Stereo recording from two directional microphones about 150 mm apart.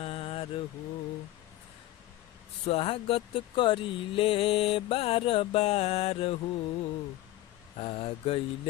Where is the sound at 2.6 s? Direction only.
40° left (ahead or behind).